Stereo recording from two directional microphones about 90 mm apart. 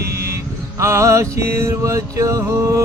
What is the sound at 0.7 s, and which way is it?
Music, 35° right (ahead or behind).